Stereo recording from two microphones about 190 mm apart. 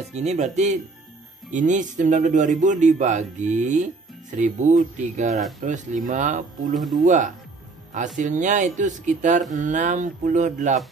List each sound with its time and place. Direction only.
0.1 s a man's voice: 35° right (ahead or behind)
6.7 s speech: centre (ahead or behind)
7.0 s a man's voice: 40° right (ahead or behind)